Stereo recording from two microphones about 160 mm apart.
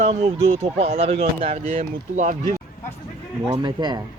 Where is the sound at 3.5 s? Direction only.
25° right (ahead or behind).